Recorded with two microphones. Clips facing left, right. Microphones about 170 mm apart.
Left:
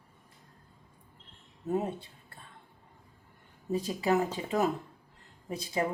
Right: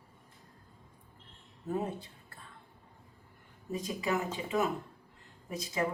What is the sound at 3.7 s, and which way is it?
Speech, 35° left (ahead or behind).